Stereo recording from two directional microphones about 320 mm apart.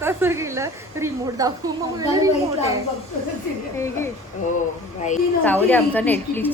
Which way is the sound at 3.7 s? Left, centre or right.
Centre.